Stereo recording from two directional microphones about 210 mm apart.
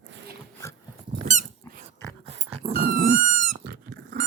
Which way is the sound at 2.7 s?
40° right (ahead or behind).